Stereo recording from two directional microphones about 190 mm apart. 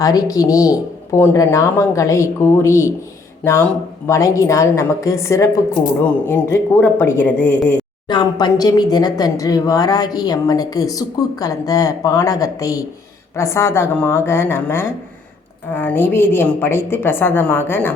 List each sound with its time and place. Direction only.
0.0 s speech: 20° left (ahead or behind)
8.0 s speech: 20° left (ahead or behind)